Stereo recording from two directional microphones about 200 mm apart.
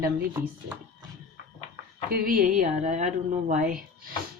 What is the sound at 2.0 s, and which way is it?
Speech, 45° right (ahead or behind).